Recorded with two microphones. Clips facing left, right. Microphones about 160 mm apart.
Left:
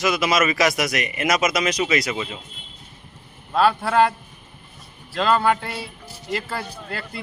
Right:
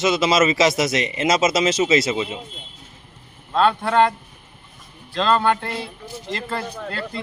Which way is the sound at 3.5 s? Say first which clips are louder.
Right 1 dB; 5° left (ahead or behind).